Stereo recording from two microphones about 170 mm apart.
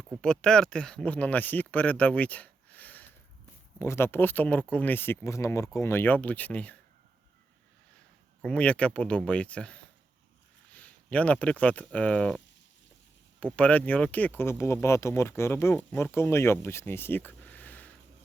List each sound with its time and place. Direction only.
0.2 s speech: 5° left (ahead or behind)
8.4 s speech: 5° left (ahead or behind)
13.4 s speech: 10° left (ahead or behind)
16.6 s a sound: 15° left (ahead or behind)